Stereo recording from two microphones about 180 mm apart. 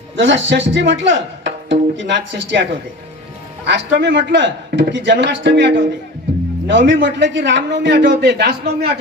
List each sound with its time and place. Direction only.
0.2 s speech: 90° right
3.7 s a man's voice: 80° right